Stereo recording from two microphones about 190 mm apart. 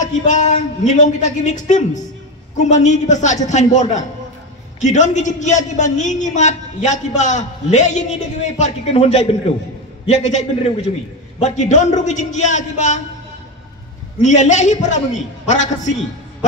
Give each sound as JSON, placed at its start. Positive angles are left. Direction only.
{"t": 0.0, "sound": "a man's voice", "side_deg": 40}
{"t": 14.2, "sound": "a man's voice", "side_deg": 40}